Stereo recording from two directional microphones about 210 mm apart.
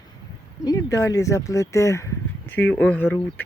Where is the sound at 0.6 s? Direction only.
15° left (ahead or behind).